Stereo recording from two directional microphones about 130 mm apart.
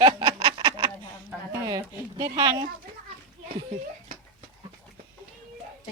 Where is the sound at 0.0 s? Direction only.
40° right (ahead or behind).